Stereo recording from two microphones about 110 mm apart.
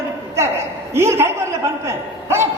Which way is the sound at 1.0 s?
25° right (ahead or behind).